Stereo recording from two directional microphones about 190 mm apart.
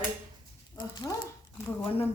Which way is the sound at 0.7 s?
20° left (ahead or behind).